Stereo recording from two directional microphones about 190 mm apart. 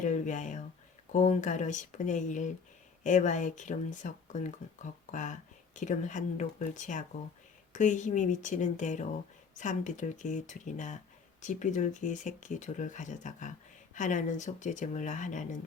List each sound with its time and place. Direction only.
0.0 s speech: 40° left (ahead or behind)